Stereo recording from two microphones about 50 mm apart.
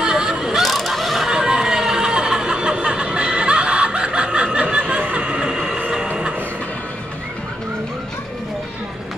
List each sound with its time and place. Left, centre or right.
0.0 s a sound: centre
0.6 s fowl: centre
5.0 s train: right